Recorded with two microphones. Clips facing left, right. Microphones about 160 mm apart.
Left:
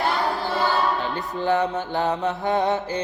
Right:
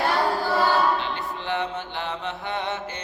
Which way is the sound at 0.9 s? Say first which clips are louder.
Left 3 dB; 40° left (ahead or behind).